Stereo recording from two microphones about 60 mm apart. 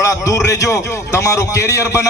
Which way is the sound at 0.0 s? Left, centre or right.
Left.